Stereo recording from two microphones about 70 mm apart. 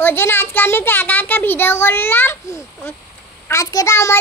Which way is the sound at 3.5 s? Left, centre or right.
Left.